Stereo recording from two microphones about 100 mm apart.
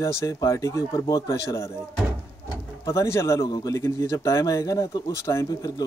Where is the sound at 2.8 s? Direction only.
30° left (ahead or behind).